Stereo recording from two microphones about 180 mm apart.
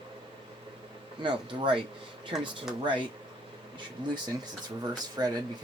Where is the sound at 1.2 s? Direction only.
25° right (ahead or behind).